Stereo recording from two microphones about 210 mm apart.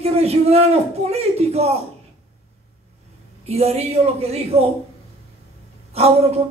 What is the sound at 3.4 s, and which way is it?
A woman's voice, 30° right (ahead or behind).